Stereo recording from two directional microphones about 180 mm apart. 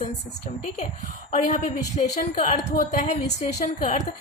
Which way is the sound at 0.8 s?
40° left (ahead or behind).